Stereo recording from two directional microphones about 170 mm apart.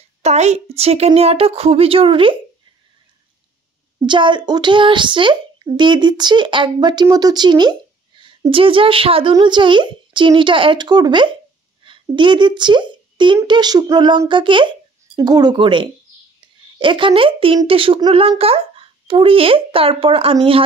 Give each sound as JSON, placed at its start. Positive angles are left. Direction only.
{"t": 0.2, "sound": "a child's voice", "side_deg": -40}
{"t": 4.0, "sound": "a child's voice", "side_deg": -30}